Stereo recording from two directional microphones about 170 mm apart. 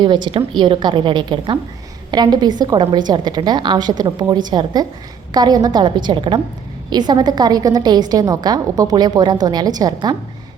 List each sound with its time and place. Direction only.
0.0 s a woman's voice: 25° right (ahead or behind)